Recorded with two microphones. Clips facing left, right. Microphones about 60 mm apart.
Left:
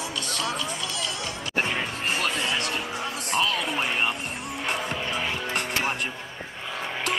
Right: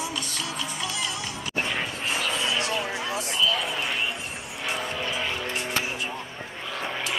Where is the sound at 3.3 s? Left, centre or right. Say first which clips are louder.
Left 2 dB; left.